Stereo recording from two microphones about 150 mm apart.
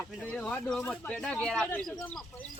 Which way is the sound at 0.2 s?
10° left (ahead or behind).